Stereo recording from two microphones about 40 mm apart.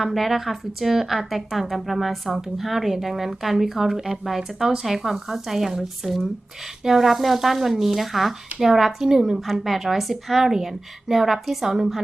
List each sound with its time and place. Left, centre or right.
0.0 s speech: centre
9.5 s speech: centre